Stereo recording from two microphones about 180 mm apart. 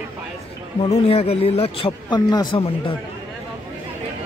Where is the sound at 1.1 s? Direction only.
35° left (ahead or behind).